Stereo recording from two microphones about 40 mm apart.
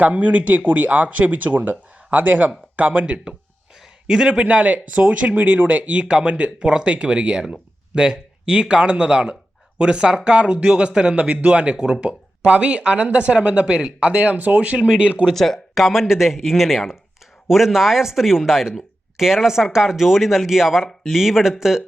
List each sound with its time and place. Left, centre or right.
0.0 s speech: right
4.0 s a man's voice: centre
4.4 s speech: right
15.3 s speech: centre